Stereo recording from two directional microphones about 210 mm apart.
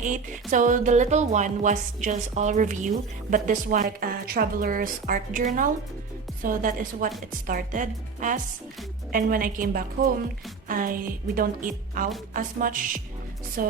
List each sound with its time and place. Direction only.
0.5 s a woman's voice: 40° right (ahead or behind)